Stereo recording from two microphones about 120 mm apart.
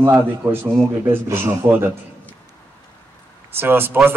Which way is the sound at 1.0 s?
20° right (ahead or behind).